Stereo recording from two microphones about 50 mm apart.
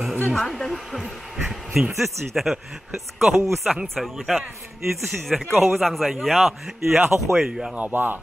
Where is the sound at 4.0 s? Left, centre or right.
Centre.